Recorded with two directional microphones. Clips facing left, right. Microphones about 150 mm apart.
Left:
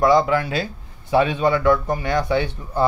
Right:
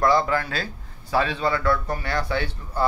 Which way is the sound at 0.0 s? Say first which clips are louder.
Left 4 dB; 15° left (ahead or behind).